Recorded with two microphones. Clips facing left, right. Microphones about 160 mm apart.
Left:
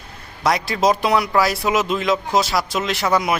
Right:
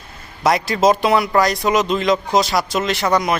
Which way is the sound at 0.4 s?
Centre (ahead or behind).